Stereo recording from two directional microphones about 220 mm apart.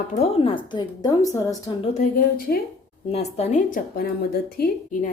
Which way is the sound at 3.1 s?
30° left (ahead or behind).